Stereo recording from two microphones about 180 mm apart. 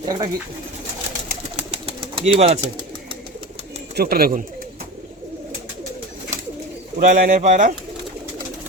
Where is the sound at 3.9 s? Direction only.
55° right (ahead or behind).